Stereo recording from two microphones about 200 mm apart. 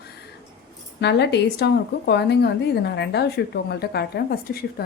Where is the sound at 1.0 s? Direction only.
60° left (ahead or behind).